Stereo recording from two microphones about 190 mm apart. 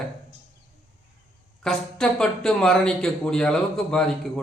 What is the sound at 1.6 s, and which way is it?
Speech, 5° left (ahead or behind).